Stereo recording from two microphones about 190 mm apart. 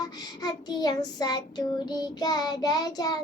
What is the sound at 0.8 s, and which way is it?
Child singing, 20° left (ahead or behind).